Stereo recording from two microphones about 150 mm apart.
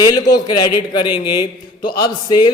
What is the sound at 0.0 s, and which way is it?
Speech, 25° left (ahead or behind).